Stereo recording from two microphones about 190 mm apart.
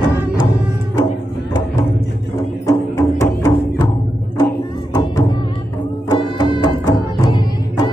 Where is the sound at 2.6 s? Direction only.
15° left (ahead or behind).